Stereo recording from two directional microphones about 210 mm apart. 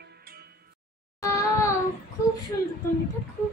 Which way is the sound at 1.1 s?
15° left (ahead or behind).